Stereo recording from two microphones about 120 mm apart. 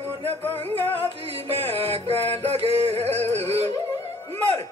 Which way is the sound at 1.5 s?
55° right (ahead or behind).